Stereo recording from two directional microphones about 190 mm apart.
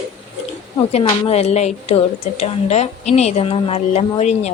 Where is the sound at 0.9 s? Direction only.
35° left (ahead or behind).